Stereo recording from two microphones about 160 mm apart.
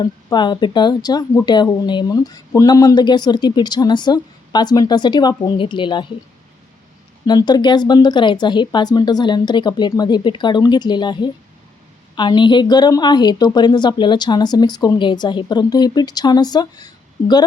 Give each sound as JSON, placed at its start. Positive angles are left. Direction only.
{"t": 0.0, "sound": "speech", "side_deg": 25}
{"t": 7.3, "sound": "speech", "side_deg": 25}